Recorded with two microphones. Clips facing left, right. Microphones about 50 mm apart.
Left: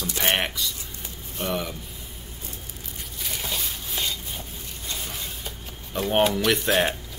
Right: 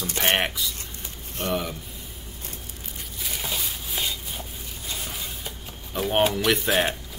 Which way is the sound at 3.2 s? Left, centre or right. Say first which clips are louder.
Even; centre.